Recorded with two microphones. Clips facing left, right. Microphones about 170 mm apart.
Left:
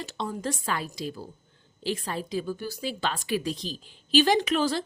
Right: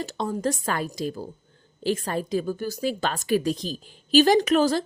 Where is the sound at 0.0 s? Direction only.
45° right (ahead or behind).